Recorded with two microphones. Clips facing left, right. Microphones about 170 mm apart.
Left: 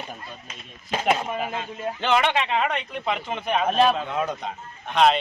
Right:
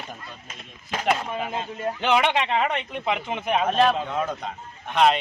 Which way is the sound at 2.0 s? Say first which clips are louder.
Even; 10° right (ahead or behind).